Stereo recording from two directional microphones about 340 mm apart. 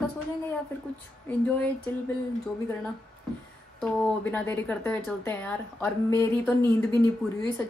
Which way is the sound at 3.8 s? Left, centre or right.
Centre.